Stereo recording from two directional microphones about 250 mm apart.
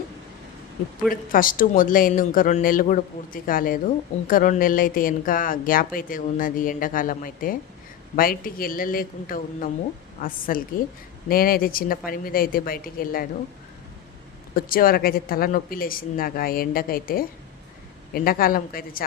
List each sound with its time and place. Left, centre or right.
1.1 s a woman's voice: left
14.5 s a woman's voice: left